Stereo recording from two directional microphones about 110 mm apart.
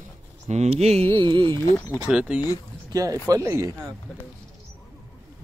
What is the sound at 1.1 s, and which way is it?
Carnatic music, 50° right (ahead or behind).